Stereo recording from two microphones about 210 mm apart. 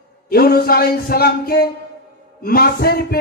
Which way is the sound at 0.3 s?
45° left (ahead or behind).